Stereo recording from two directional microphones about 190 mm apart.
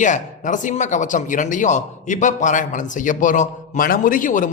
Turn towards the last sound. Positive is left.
turn(degrees=45)  # may be behind; listen again after turning